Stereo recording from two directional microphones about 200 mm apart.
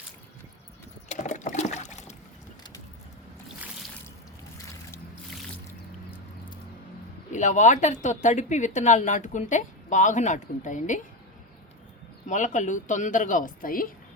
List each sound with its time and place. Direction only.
1.0 s boat: 35° left (ahead or behind)
7.3 s speech: 40° left (ahead or behind)
12.3 s speech: 40° left (ahead or behind)